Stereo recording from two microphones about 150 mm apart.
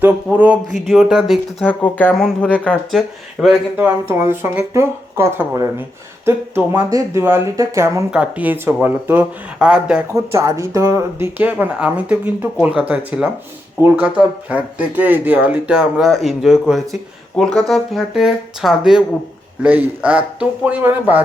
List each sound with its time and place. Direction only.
0.0 s speech: 10° right (ahead or behind)
1.6 s speech: 10° left (ahead or behind)
3.8 s speech: 15° right (ahead or behind)
8.1 s speech: 10° right (ahead or behind)
10.1 s speech: 20° right (ahead or behind)